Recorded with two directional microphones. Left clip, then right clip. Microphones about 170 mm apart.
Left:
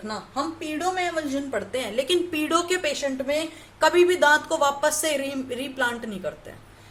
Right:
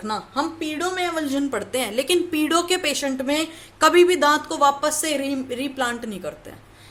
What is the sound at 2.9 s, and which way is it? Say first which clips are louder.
A woman's voice: right 2 dB; 45° right (ahead or behind).